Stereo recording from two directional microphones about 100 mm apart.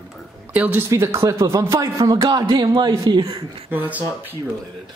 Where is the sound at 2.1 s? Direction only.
50° right (ahead or behind).